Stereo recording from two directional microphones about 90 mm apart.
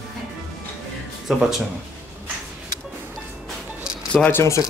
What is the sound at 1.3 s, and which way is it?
Speech, 5° right (ahead or behind).